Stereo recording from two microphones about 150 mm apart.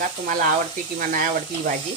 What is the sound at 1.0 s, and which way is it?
Speech, 65° right (ahead or behind).